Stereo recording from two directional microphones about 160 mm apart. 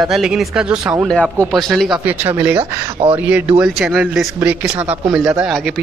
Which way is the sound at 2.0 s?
10° right (ahead or behind).